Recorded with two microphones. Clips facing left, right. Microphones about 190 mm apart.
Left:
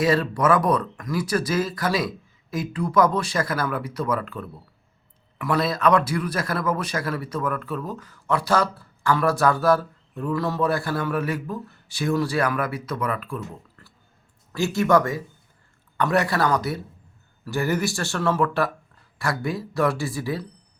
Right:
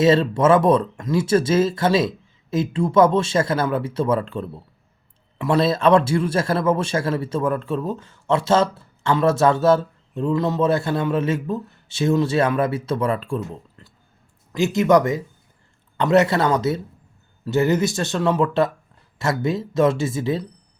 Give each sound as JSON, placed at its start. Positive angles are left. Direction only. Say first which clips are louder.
{"t": 0.0, "sound": "a man's voice", "louder": "right 5 dB", "side_deg": -25}